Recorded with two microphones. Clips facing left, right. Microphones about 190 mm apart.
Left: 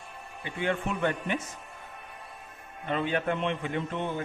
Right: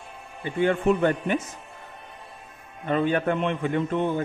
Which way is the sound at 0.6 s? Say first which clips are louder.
Right 8 dB; 40° right (ahead or behind).